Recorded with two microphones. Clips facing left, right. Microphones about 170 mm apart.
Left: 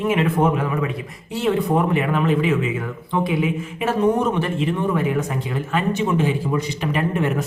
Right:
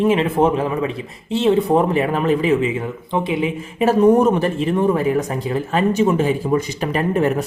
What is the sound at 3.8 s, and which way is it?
Speech, 40° right (ahead or behind).